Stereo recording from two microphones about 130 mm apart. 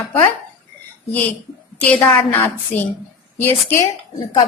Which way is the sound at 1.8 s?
10° left (ahead or behind).